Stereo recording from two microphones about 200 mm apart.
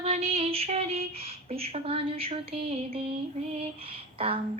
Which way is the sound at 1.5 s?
30° right (ahead or behind).